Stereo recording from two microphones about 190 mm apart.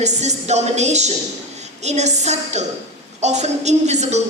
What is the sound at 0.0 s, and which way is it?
A woman's voice, 35° right (ahead or behind).